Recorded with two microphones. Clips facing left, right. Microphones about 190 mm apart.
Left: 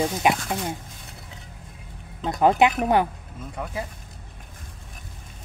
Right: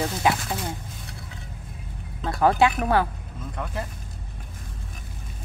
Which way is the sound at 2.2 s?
20° left (ahead or behind).